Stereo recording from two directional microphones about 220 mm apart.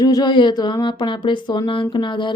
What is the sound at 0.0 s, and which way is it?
Speech, 20° left (ahead or behind).